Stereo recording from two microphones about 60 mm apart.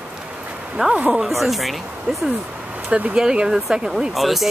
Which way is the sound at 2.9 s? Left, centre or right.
Right.